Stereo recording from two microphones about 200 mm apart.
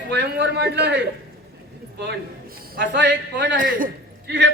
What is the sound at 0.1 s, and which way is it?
Speech, 55° right (ahead or behind).